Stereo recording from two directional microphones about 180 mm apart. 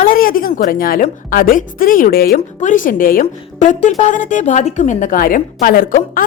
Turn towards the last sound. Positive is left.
turn(degrees=50)  # may be behind; listen again after turning